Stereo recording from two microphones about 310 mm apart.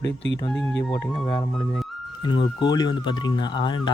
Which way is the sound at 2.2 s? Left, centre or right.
Centre.